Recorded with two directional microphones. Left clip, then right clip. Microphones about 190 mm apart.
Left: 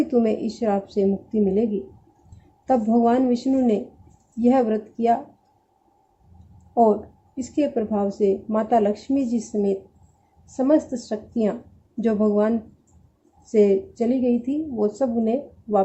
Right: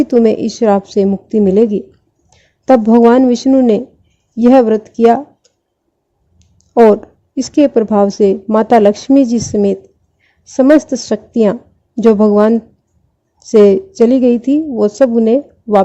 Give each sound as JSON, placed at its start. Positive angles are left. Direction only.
{"t": 0.1, "sound": "a woman's voice", "side_deg": -50}
{"t": 2.6, "sound": "a woman's voice", "side_deg": -60}
{"t": 7.3, "sound": "a woman's voice", "side_deg": -55}
{"t": 10.8, "sound": "a woman's voice", "side_deg": -60}